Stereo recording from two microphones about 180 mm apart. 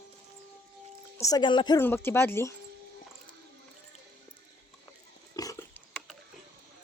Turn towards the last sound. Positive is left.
turn(degrees=20)  # may be behind; listen again after turning